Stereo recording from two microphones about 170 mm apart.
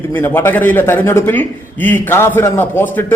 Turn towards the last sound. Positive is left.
turn(degrees=10)  # may be behind; listen again after turning